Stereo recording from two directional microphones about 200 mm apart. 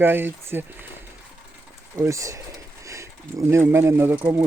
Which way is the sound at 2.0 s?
15° right (ahead or behind).